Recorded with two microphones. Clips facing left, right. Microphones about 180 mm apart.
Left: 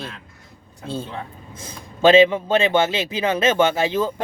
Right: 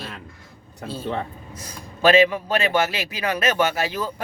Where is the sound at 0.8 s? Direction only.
25° left (ahead or behind).